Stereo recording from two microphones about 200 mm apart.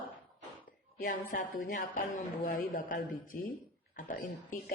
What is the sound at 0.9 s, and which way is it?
A woman's voice, 45° left (ahead or behind).